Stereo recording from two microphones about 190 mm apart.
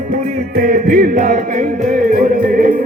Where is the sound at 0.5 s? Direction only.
50° right (ahead or behind).